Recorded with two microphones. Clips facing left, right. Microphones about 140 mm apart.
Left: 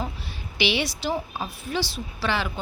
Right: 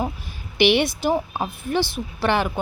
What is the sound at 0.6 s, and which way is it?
A woman's voice, 55° right (ahead or behind).